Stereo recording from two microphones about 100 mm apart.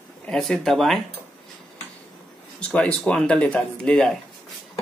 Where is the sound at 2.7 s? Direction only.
10° left (ahead or behind).